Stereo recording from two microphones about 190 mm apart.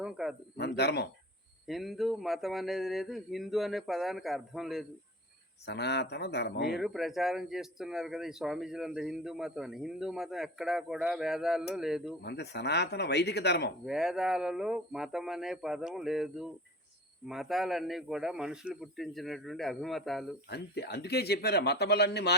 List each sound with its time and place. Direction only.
0.0 s speech: 5° right (ahead or behind)
0.5 s a man's voice: 60° left (ahead or behind)
1.6 s speech: centre (ahead or behind)
5.6 s a man's voice: 60° left (ahead or behind)
6.7 s speech: centre (ahead or behind)
12.2 s a man's voice: 60° left (ahead or behind)
13.8 s speech: centre (ahead or behind)
20.5 s a man's voice: 60° left (ahead or behind)